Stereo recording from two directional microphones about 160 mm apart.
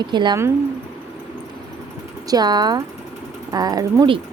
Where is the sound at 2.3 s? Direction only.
25° right (ahead or behind).